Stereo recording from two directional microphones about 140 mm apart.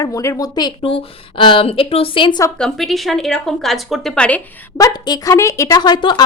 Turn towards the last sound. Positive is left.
turn(degrees=30)  # may be behind; listen again after turning